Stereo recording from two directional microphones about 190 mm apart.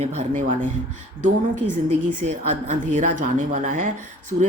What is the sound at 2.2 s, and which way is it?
A woman's voice, 35° right (ahead or behind).